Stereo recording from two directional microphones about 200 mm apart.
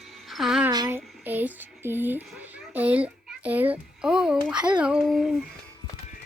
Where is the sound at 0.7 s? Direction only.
15° right (ahead or behind); by 5.3 s centre (ahead or behind).